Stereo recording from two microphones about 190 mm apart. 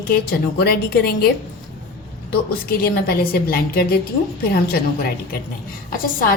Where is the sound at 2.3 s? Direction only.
50° left (ahead or behind).